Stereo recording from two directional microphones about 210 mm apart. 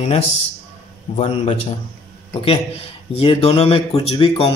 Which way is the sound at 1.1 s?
30° left (ahead or behind).